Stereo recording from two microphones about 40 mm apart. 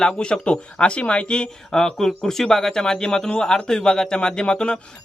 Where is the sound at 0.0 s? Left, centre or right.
Left.